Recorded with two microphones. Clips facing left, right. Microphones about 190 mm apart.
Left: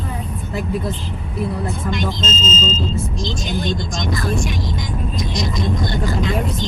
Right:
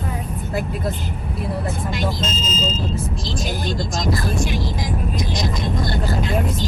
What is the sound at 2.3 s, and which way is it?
Smoke detector, 25° left (ahead or behind).